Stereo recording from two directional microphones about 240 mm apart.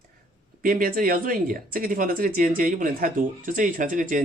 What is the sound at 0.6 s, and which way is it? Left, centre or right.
A man's voice, right.